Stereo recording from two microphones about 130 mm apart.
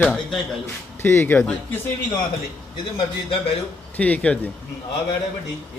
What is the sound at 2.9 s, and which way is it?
Speech, 50° left (ahead or behind).